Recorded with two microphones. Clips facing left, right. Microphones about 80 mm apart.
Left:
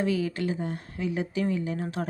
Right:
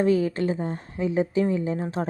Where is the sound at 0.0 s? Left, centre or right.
Right.